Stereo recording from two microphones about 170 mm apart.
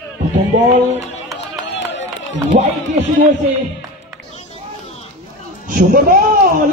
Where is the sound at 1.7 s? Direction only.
90° left.